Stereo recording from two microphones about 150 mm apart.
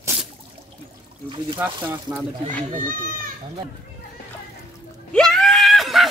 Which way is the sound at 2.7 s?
65° right (ahead or behind).